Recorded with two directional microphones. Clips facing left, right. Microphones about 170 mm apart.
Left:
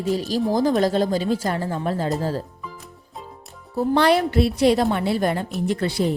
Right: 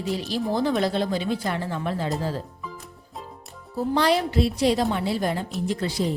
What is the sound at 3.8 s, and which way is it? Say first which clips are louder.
A woman's voice: left 4 dB; 60° left (ahead or behind).